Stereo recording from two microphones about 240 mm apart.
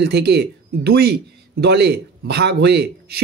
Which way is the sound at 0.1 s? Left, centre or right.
Right.